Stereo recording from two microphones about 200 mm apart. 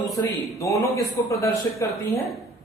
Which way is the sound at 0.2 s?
15° left (ahead or behind).